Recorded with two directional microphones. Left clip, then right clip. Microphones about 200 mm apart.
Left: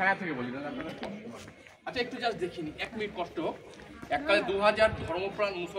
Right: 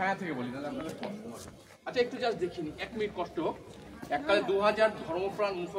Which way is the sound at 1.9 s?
50° left (ahead or behind).